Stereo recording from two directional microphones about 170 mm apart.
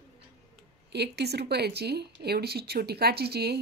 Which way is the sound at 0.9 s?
75° right (ahead or behind).